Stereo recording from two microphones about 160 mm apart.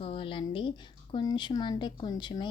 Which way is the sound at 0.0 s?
35° left (ahead or behind).